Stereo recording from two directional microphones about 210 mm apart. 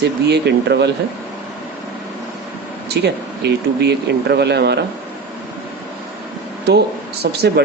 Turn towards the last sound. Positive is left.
turn(degrees=-50)  # may be behind; listen again after turning